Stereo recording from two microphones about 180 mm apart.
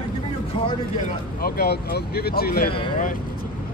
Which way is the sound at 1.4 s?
60° left (ahead or behind).